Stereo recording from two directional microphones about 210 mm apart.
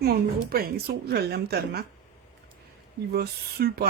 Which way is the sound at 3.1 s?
50° right (ahead or behind).